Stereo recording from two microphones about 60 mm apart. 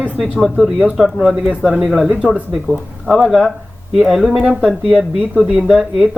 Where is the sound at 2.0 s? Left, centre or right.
Right.